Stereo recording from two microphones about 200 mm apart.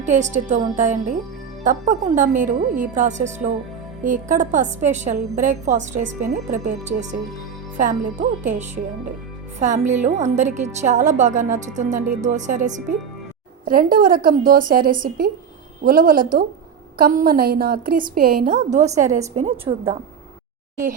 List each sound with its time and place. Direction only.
0.0 s a woman's voice: 35° right (ahead or behind)